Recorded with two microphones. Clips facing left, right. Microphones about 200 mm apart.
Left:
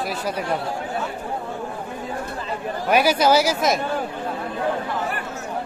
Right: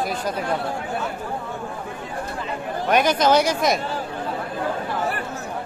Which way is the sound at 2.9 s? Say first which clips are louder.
Left 1 dB; 5° left (ahead or behind).